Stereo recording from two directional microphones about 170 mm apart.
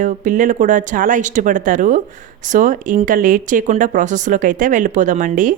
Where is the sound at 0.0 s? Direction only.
50° right (ahead or behind).